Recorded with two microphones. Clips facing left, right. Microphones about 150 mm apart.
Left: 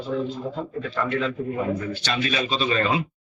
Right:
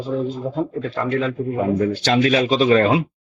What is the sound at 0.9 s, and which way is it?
Speech, 40° right (ahead or behind).